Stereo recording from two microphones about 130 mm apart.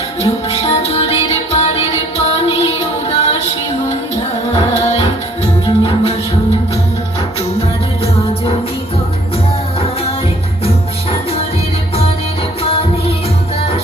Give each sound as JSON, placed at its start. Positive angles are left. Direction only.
{"t": 0.5, "sound": "music", "side_deg": 55}
{"t": 5.6, "sound": "music", "side_deg": 45}
{"t": 9.8, "sound": "music", "side_deg": 50}